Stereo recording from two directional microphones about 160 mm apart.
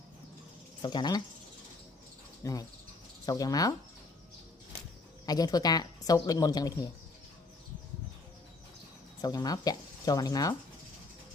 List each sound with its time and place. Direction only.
0.8 s a woman's voice: 25° left (ahead or behind)
2.4 s cricket: 20° left (ahead or behind)
3.2 s a woman's voice: 25° left (ahead or behind)
5.2 s a woman's voice: 25° left (ahead or behind)
9.2 s a woman's voice: 25° left (ahead or behind)